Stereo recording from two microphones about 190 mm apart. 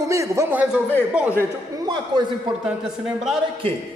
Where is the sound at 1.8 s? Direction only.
25° right (ahead or behind).